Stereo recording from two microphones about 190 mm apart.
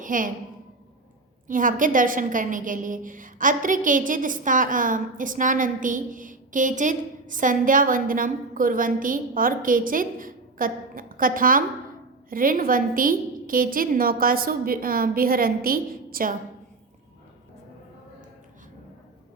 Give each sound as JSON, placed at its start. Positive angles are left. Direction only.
{"t": 0.0, "sound": "a woman's voice", "side_deg": -45}
{"t": 1.5, "sound": "a woman's voice", "side_deg": -45}